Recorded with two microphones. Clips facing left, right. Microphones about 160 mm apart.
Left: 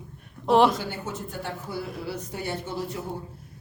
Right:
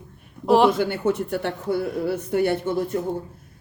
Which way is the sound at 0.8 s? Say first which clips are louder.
Right 11 dB; 65° right (ahead or behind).